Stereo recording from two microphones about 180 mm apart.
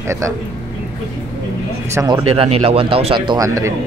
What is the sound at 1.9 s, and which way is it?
Speech, 20° right (ahead or behind).